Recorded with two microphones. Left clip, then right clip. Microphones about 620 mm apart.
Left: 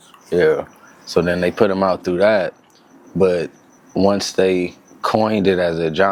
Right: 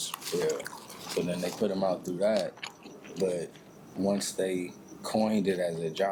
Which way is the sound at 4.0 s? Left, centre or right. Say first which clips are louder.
Left 14 dB; left.